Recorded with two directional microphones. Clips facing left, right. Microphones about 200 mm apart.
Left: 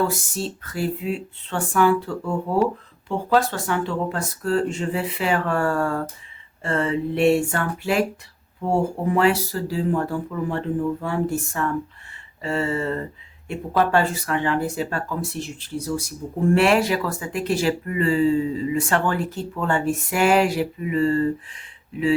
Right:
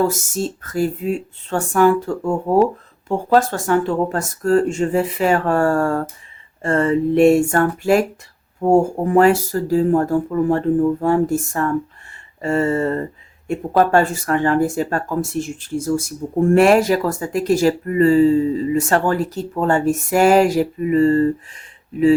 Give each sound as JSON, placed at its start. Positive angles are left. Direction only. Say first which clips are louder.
{"t": 0.0, "sound": "speech", "louder": "right 5 dB", "side_deg": -45}